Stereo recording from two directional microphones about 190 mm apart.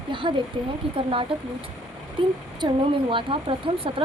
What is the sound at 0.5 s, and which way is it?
A woman's voice, 25° right (ahead or behind).